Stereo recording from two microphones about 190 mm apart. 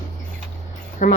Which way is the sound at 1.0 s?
45° left (ahead or behind).